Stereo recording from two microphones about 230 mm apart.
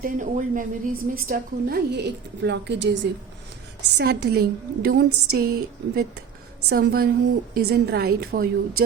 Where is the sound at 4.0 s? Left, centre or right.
Right.